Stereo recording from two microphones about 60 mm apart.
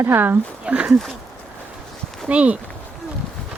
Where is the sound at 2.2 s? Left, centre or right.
Right.